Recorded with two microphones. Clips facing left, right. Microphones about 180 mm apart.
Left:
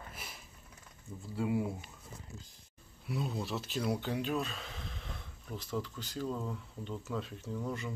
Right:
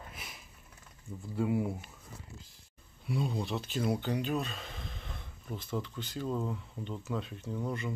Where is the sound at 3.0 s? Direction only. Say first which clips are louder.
Right 3 dB; centre (ahead or behind).